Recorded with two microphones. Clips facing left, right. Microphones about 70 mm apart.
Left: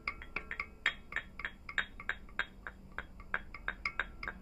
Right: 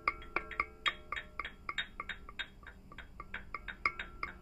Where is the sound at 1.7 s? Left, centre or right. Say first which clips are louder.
Left 4 dB; right.